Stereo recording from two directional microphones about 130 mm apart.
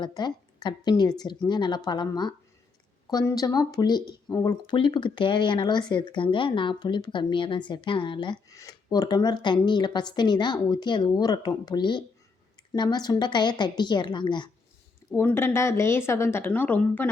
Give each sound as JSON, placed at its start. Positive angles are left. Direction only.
{"t": 0.0, "sound": "speech", "side_deg": 35}
{"t": 15.1, "sound": "a woman's voice", "side_deg": 15}